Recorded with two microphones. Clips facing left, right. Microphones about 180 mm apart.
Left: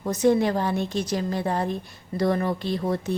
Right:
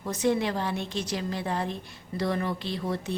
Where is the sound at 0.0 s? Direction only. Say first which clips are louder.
Left 6 dB; 40° left (ahead or behind).